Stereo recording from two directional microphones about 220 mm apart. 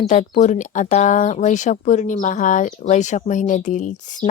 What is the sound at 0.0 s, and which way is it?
Speech, 35° left (ahead or behind).